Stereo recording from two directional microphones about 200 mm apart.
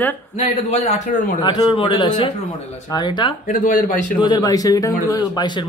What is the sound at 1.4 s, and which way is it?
A man's voice, 25° left (ahead or behind).